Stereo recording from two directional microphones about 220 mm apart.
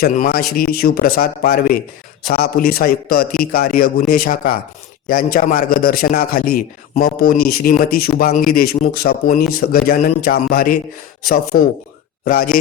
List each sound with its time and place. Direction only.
0.0 s a man's voice: 40° left (ahead or behind)